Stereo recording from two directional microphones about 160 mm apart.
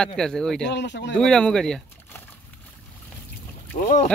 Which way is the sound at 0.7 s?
90° left.